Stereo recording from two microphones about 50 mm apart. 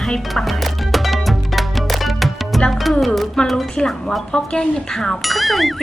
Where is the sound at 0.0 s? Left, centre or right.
Centre.